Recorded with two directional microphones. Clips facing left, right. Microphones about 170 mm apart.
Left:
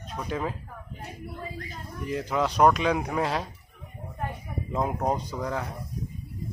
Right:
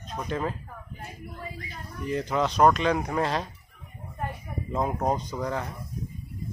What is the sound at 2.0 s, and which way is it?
A man's voice, 5° left (ahead or behind).